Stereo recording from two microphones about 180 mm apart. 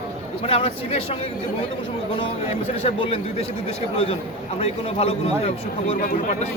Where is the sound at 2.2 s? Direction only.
30° left (ahead or behind).